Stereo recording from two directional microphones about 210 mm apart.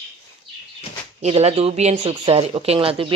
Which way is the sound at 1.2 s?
30° right (ahead or behind).